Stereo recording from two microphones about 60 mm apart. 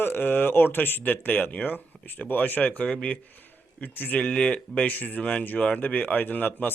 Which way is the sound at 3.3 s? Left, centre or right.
Left.